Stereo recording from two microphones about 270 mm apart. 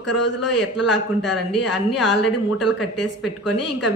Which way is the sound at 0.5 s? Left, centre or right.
Centre.